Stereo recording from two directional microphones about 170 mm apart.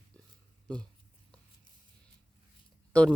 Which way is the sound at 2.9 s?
5° left (ahead or behind).